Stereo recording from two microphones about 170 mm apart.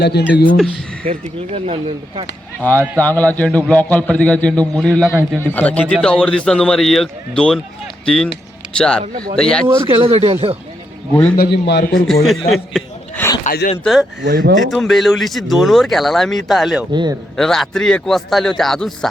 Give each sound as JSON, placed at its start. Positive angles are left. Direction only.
{"t": 0.0, "sound": "a man's voice", "side_deg": 75}
{"t": 1.5, "sound": "speech", "side_deg": -40}
{"t": 2.6, "sound": "a man's voice", "side_deg": 10}
{"t": 9.6, "sound": "speech", "side_deg": -25}
{"t": 11.1, "sound": "a man's voice", "side_deg": 10}
{"t": 11.3, "sound": "a man's voice", "side_deg": 80}
{"t": 12.2, "sound": "a man's voice", "side_deg": 0}
{"t": 13.4, "sound": "speech", "side_deg": 60}
{"t": 13.8, "sound": "a man's voice", "side_deg": 0}
{"t": 14.2, "sound": "speech", "side_deg": -75}
{"t": 14.5, "sound": "a man's voice", "side_deg": 0}
{"t": 16.9, "sound": "a man's voice", "side_deg": -25}
{"t": 17.3, "sound": "a man's voice", "side_deg": 5}